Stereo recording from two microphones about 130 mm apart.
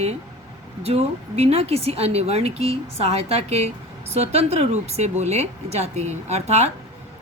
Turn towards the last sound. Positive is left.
turn(degrees=-55)  # may be behind; listen again after turning